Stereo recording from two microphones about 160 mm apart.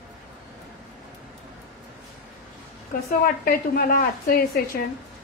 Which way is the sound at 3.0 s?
65° left (ahead or behind).